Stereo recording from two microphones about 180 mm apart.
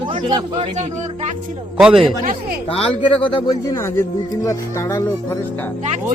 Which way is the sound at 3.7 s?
15° left (ahead or behind).